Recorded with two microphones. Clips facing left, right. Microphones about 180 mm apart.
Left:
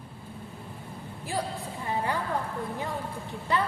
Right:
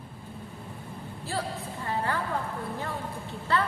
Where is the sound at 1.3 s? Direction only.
15° left (ahead or behind).